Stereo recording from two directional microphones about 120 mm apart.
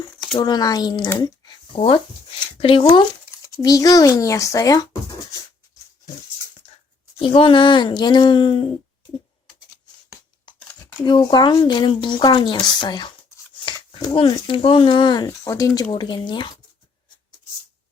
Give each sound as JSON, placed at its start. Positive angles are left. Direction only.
{"t": 0.3, "sound": "speech", "side_deg": 35}
{"t": 1.2, "sound": "a sound", "side_deg": 40}
{"t": 2.6, "sound": "speech", "side_deg": 50}
{"t": 3.3, "sound": "speech", "side_deg": 30}
{"t": 6.6, "sound": "dog", "side_deg": 55}
{"t": 7.2, "sound": "speech", "side_deg": 45}
{"t": 10.6, "sound": "a sound", "side_deg": 20}
{"t": 11.0, "sound": "speech", "side_deg": 35}
{"t": 13.7, "sound": "a sound", "side_deg": 35}
{"t": 14.4, "sound": "speech", "side_deg": 45}